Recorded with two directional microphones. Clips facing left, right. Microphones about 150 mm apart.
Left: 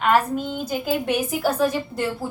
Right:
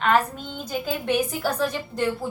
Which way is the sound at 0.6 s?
5° left (ahead or behind).